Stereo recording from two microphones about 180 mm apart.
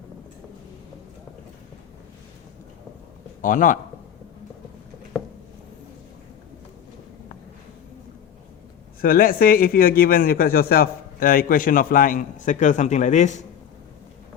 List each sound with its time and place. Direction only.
3.4 s a man's voice: 45° left (ahead or behind)
9.0 s a man's voice: 55° left (ahead or behind)